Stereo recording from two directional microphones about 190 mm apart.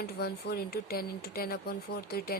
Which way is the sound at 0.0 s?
55° left (ahead or behind).